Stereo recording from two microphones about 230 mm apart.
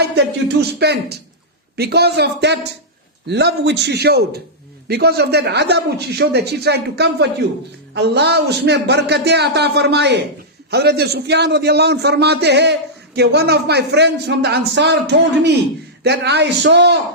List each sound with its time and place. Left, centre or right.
0.0 s a man's voice: right